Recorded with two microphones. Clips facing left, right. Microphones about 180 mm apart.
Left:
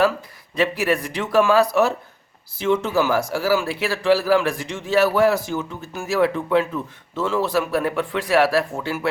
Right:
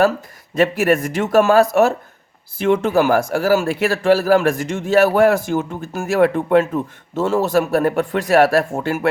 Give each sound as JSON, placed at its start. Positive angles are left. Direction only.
{"t": 0.5, "sound": "a man's voice", "side_deg": -50}